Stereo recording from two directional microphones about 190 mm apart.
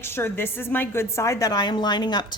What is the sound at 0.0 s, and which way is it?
A woman's voice, 10° left (ahead or behind).